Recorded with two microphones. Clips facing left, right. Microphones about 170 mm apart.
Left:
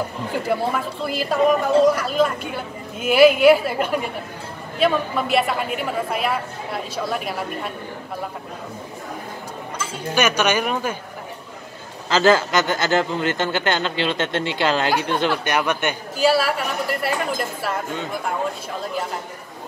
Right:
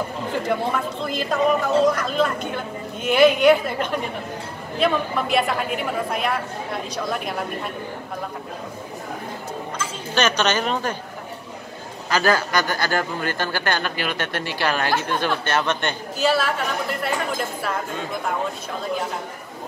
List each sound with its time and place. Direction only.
0.5 s a woman's voice: 5° left (ahead or behind)
10.1 s speech: 10° left (ahead or behind)
12.1 s a man's voice: 25° left (ahead or behind); by 17.1 s 5° left (ahead or behind)